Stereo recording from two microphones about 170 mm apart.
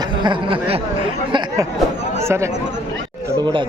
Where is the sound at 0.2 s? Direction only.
30° right (ahead or behind).